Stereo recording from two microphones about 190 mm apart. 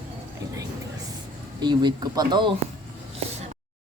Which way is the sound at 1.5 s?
25° right (ahead or behind).